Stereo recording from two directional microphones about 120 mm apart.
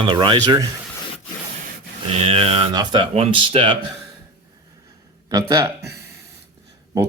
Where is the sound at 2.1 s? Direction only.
60° right (ahead or behind); by 3.0 s 40° right (ahead or behind).